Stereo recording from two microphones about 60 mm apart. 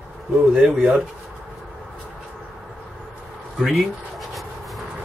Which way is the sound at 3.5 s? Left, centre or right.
Centre.